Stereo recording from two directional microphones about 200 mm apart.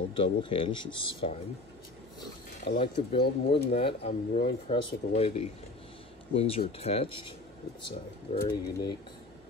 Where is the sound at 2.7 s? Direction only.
55° left (ahead or behind).